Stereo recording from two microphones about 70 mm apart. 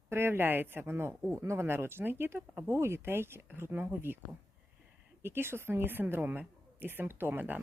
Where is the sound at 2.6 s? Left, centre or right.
Right.